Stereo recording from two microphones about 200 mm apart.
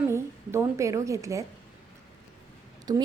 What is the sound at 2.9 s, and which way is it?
Speech, 20° right (ahead or behind).